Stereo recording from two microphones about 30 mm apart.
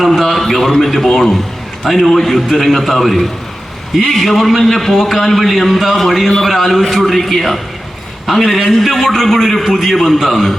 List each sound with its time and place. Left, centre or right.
0.2 s a man's voice: centre